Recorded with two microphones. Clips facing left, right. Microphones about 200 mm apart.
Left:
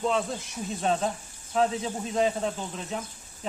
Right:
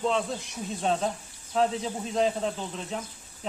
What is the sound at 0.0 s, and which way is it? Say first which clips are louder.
Speech: even; 5° left (ahead or behind).